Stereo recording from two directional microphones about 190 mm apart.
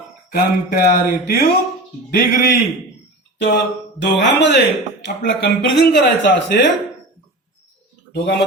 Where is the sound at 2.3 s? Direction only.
55° left (ahead or behind).